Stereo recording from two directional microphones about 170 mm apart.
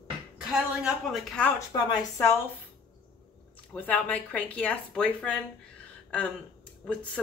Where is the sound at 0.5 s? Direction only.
5° right (ahead or behind).